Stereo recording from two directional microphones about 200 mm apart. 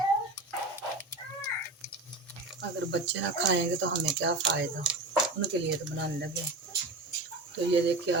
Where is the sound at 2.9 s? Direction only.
60° right (ahead or behind).